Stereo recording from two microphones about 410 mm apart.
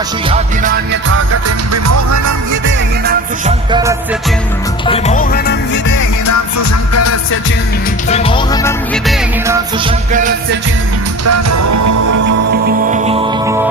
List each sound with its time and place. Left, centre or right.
0.3 s music: centre
1.3 s music: right
2.6 s music: right
3.7 s music: centre
4.9 s music: centre
5.9 s music: left
8.1 s music: centre
9.8 s music: centre
11.3 s music: right
12.6 s music: centre